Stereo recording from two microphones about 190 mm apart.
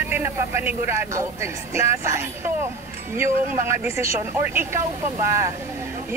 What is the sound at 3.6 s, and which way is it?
Speech, 15° right (ahead or behind).